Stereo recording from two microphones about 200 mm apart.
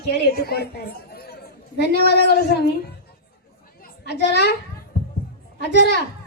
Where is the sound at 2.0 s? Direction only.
55° left (ahead or behind).